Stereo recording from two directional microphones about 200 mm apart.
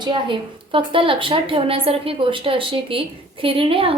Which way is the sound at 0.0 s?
25° right (ahead or behind).